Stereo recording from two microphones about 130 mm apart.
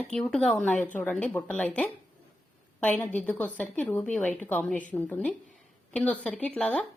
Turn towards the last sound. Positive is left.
turn(degrees=5)  # may be behind; listen again after turning